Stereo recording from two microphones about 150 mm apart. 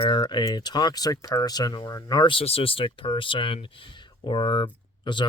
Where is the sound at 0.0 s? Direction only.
30° left (ahead or behind).